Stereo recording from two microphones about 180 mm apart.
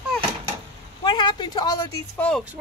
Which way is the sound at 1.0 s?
25° left (ahead or behind).